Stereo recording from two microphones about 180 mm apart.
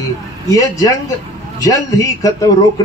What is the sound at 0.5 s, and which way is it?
A man's voice, 20° left (ahead or behind).